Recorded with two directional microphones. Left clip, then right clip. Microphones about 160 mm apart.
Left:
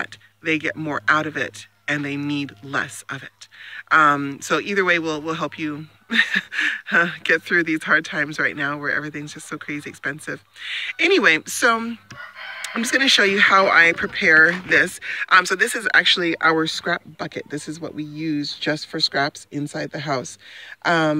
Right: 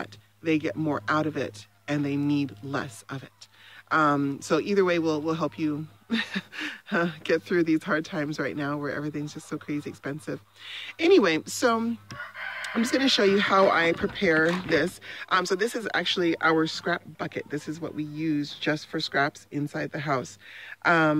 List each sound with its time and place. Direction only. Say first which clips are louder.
0.0 s speech: left 5 dB; 5° right (ahead or behind)
16.2 s speech: left 5 dB; 30° left (ahead or behind)